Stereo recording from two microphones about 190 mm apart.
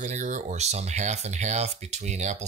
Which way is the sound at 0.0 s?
40° right (ahead or behind).